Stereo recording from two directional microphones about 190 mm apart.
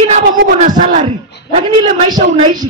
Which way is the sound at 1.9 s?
25° right (ahead or behind).